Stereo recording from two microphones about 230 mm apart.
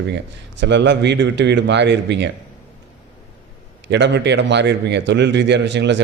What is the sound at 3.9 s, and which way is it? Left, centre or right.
Speech, right.